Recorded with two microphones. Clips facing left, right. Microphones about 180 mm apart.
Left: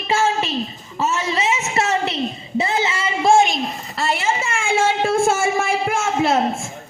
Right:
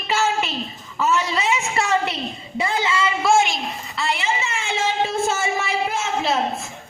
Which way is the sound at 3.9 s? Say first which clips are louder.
Left 3 dB; 45° left (ahead or behind).